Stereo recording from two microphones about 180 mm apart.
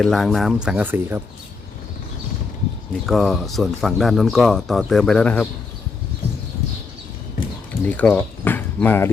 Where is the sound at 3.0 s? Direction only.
Centre (ahead or behind).